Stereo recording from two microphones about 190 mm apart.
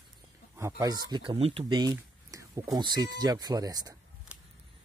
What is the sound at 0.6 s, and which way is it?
Speech, 15° right (ahead or behind).